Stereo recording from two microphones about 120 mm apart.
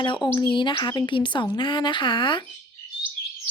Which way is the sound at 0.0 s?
40° left (ahead or behind).